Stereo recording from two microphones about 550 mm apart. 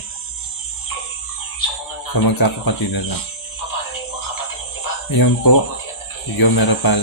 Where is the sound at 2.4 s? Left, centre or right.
Left.